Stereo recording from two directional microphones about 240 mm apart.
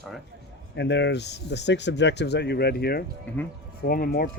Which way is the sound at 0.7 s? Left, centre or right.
Left.